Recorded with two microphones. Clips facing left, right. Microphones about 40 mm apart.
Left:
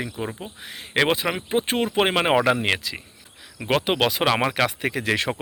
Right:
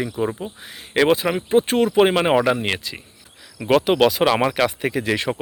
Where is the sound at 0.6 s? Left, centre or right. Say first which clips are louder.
Right 4 dB; left.